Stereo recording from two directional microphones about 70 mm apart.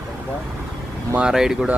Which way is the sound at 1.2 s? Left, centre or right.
Centre.